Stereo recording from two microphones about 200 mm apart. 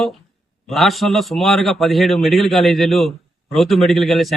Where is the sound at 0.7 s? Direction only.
Centre (ahead or behind).